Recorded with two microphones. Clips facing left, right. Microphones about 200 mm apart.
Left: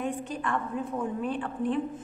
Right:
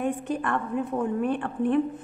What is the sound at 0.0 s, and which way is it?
A woman's voice, 60° right (ahead or behind).